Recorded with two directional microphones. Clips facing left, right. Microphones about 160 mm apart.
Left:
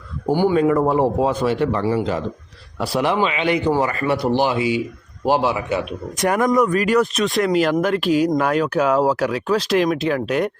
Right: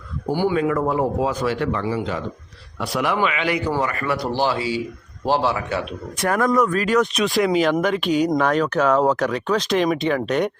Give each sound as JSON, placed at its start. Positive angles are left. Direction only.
{"t": 0.3, "sound": "a man's voice", "side_deg": 35}